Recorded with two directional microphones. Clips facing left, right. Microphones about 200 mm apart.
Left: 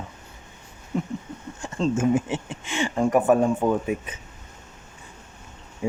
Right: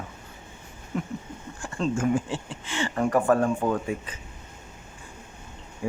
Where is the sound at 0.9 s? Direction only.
30° left (ahead or behind).